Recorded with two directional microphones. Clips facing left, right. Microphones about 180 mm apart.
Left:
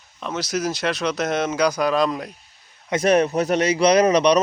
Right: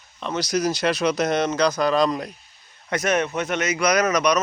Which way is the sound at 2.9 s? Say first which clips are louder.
Left 5 dB; 30° left (ahead or behind).